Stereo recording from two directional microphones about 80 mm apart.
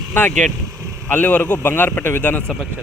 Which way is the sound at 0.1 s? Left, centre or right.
Left.